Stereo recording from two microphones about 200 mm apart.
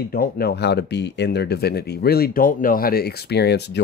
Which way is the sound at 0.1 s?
50° left (ahead or behind).